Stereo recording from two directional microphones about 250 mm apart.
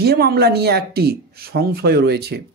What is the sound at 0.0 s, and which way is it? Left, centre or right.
A man's voice, right.